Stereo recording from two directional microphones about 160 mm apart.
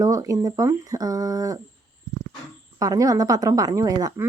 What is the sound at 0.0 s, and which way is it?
Speech, 20° right (ahead or behind).